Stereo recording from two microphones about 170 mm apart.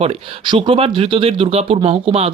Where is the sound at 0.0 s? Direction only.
35° right (ahead or behind).